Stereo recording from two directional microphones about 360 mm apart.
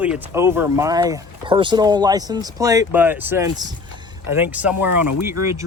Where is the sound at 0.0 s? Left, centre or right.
Centre.